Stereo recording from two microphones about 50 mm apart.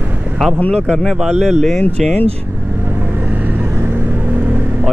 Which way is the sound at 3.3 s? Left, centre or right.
Right.